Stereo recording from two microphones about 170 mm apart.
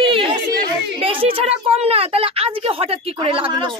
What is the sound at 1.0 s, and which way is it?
A woman's voice, 30° right (ahead or behind).